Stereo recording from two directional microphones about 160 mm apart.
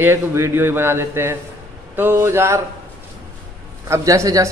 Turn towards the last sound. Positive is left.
turn(degrees=-20)  # may be behind; listen again after turning